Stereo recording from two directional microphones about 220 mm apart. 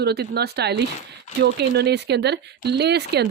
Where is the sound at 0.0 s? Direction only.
45° right (ahead or behind).